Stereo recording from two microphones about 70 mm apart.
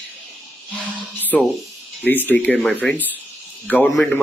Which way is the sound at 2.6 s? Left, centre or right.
Centre.